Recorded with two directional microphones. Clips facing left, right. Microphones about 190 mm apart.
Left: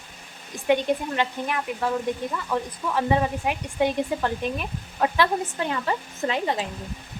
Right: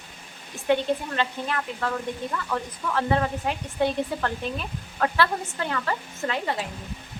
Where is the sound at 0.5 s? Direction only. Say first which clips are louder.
Left 1 dB; 15° left (ahead or behind).